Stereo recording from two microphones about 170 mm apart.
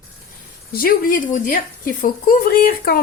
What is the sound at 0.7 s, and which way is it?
Speech, 55° left (ahead or behind).